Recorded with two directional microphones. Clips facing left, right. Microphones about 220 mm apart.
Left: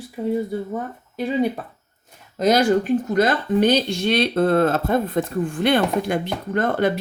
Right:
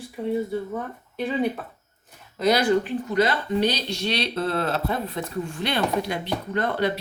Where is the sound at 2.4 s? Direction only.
45° left (ahead or behind).